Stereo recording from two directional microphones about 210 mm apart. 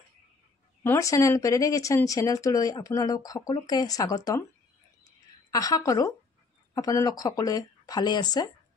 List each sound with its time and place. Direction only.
0.8 s speech: 15° left (ahead or behind)
5.5 s speech: 15° left (ahead or behind)